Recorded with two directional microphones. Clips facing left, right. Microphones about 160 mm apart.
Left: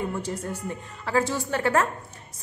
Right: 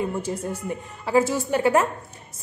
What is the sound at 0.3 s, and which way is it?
A woman's voice, 10° right (ahead or behind).